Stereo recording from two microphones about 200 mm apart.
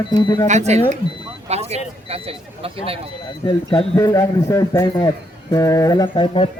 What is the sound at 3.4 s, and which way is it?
A man's voice, 25° left (ahead or behind).